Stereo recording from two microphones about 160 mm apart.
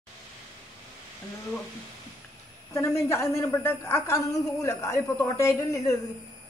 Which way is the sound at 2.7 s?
15° left (ahead or behind).